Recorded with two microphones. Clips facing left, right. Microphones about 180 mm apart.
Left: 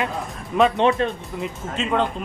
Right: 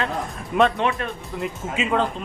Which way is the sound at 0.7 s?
30° left (ahead or behind).